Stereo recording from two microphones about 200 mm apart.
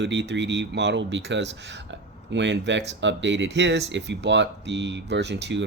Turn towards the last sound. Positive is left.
turn(degrees=-60)  # may be behind; listen again after turning